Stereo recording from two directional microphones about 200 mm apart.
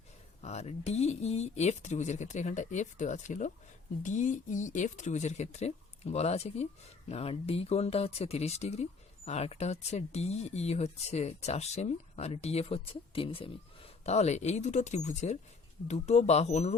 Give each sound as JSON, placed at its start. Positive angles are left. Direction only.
{"t": 0.4, "sound": "speech", "side_deg": 35}